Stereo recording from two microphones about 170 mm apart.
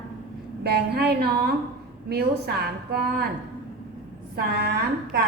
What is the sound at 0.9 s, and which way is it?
A woman's voice, 75° right (ahead or behind).